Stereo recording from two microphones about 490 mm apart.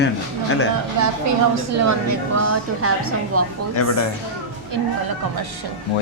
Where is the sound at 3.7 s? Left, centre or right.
Left.